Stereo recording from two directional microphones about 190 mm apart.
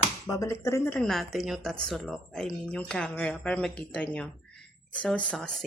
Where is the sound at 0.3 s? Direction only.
15° left (ahead or behind).